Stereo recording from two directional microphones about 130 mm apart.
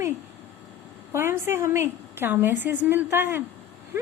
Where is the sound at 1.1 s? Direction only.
20° right (ahead or behind).